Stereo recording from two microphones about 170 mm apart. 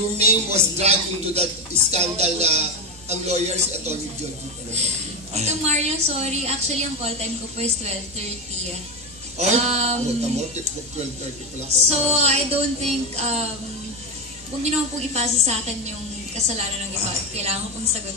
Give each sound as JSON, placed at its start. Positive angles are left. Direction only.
{"t": 0.2, "sound": "a woman's voice", "side_deg": -40}
{"t": 9.4, "sound": "a woman's voice", "side_deg": -40}
{"t": 11.9, "sound": "a woman's voice", "side_deg": -40}
{"t": 14.6, "sound": "a woman's voice", "side_deg": -40}